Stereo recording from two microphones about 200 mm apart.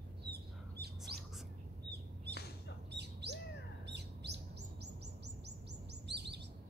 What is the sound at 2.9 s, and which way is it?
Bird, 55° right (ahead or behind).